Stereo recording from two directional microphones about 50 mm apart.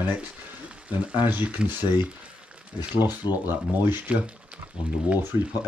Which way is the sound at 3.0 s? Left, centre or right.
Right.